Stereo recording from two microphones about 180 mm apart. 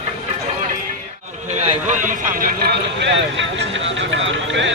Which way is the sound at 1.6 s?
40° right (ahead or behind).